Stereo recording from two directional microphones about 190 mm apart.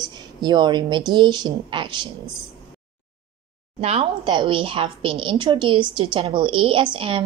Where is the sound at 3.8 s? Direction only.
30° right (ahead or behind).